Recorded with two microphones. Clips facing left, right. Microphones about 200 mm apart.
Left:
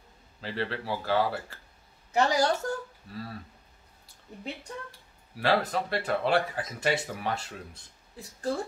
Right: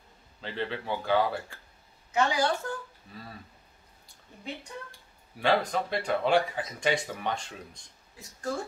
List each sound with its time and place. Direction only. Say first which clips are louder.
0.4 s speech: left 1 dB; centre (ahead or behind)
2.1 s a woman's voice: left 2 dB; 40° left (ahead or behind)
5.4 s speech: even; 5° left (ahead or behind)
8.2 s a woman's voice: left 3 dB; 30° left (ahead or behind)